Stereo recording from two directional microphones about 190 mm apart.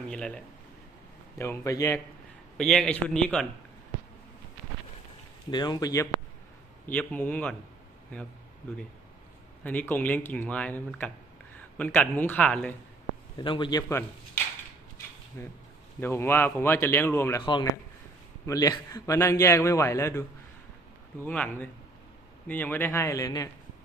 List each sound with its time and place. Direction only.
0.1 s a man's voice: 5° left (ahead or behind)
1.4 s a man's voice: 15° left (ahead or behind)
2.6 s a man's voice: 5° left (ahead or behind)
5.5 s a man's voice: 20° left (ahead or behind)
9.6 s a man's voice: 10° left (ahead or behind)
13.4 s speech: 25° left (ahead or behind)
15.4 s a man's voice: 15° left (ahead or behind)
17.4 s a man's voice: 25° left (ahead or behind)